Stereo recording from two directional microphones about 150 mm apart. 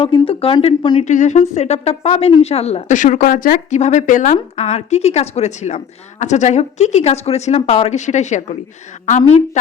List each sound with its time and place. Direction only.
0.0 s speech: 35° left (ahead or behind)
1.0 s a woman's voice: 55° left (ahead or behind)